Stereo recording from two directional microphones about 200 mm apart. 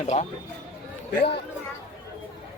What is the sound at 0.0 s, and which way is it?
Speech, 35° left (ahead or behind).